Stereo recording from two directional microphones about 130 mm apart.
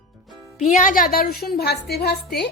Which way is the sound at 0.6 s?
85° left.